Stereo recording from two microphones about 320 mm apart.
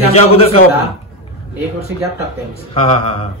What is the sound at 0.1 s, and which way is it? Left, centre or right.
Speech, centre.